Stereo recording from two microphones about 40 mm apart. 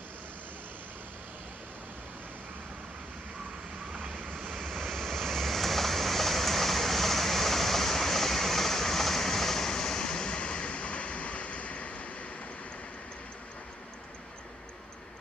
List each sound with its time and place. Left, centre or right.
3.9 s vehicle: right
4.4 s vehicle: centre; by 12.1 s left